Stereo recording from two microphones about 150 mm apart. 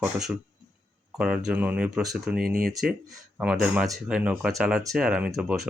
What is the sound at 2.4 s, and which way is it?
Speech, 80° right.